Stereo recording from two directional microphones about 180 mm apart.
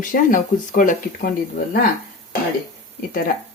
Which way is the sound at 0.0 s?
50° left (ahead or behind).